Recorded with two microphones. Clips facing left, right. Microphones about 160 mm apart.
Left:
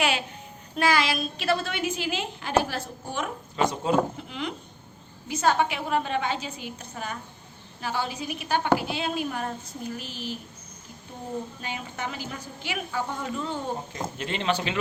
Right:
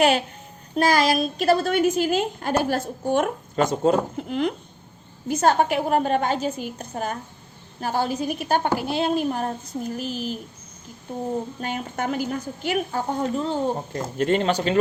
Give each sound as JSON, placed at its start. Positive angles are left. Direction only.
{"t": 0.0, "sound": "a woman's voice", "side_deg": -45}
{"t": 11.6, "sound": "a woman's voice", "side_deg": -50}
{"t": 13.9, "sound": "a woman's voice", "side_deg": -50}